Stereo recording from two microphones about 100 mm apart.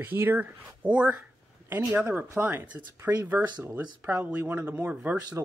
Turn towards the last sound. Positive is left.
turn(degrees=-25)  # may be behind; listen again after turning